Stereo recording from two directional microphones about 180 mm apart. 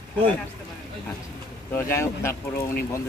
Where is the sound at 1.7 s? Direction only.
15° left (ahead or behind).